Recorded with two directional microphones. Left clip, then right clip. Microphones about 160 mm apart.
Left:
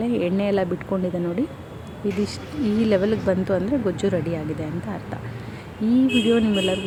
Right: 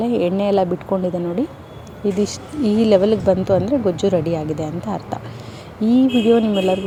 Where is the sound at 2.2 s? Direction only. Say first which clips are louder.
Right 5 dB; 15° right (ahead or behind).